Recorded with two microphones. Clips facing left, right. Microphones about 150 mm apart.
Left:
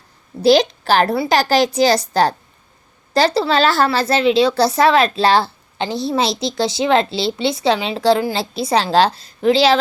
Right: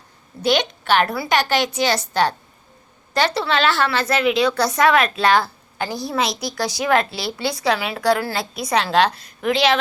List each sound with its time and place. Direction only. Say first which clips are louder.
0.4 s a woman's voice: left 7 dB; 35° left (ahead or behind)